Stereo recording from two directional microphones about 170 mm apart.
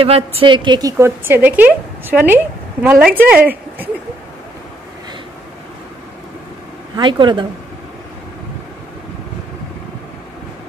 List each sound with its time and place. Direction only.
0.0 s a woman's voice: 35° right (ahead or behind); by 3.9 s 10° right (ahead or behind)
7.0 s speech: 25° right (ahead or behind)